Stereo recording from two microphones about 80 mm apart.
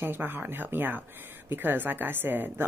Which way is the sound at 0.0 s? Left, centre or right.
Right.